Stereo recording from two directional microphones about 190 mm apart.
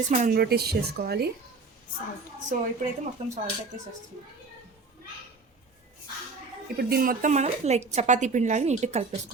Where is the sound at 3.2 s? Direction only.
35° right (ahead or behind).